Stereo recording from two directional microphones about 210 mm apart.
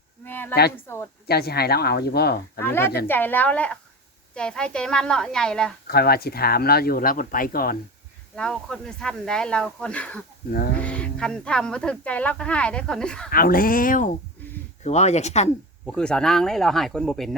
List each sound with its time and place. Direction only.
0.3 s a sound: 10° left (ahead or behind)
0.9 s a woman's voice: 10° left (ahead or behind)
1.3 s speech: 50° left (ahead or behind)
2.6 s a woman's voice: 10° left (ahead or behind)
5.9 s speech: 45° left (ahead or behind)
8.4 s speech: 5° left (ahead or behind)
13.3 s speech: 45° left (ahead or behind)
14.4 s a sound: 10° left (ahead or behind)
14.8 s speech: 30° left (ahead or behind)
15.9 s speech: 5° left (ahead or behind)